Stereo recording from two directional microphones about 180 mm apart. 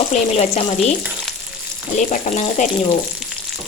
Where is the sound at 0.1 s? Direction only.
35° left (ahead or behind).